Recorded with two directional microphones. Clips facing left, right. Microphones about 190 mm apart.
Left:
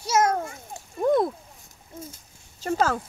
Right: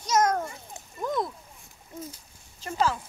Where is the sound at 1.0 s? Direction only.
60° left (ahead or behind).